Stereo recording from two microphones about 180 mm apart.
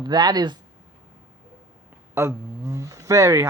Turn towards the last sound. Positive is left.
turn(degrees=-15)  # may be behind; listen again after turning